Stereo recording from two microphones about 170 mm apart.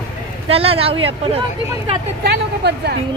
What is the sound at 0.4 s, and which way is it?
Speech, 35° right (ahead or behind).